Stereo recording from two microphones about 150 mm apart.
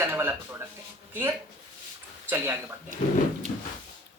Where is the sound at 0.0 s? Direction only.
15° right (ahead or behind).